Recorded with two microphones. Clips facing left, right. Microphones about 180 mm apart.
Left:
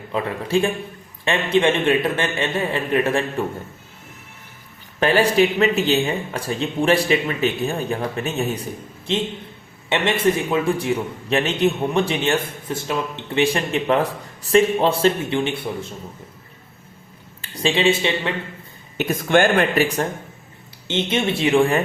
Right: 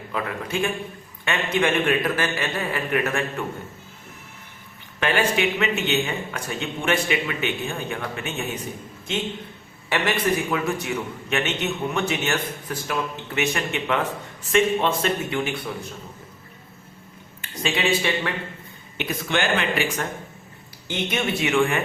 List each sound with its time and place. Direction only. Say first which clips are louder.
0.1 s a man's voice: left 7 dB; 30° left (ahead or behind)
4.9 s a man's voice: left 6 dB; 35° left (ahead or behind)
17.4 s a man's voice: left 6 dB; 30° left (ahead or behind)
18.9 s speech: left 8 dB; 45° left (ahead or behind)
20.8 s a man's voice: left 4 dB; 25° left (ahead or behind)